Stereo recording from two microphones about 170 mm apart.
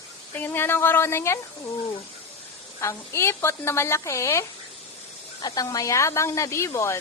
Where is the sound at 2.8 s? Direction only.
15° left (ahead or behind).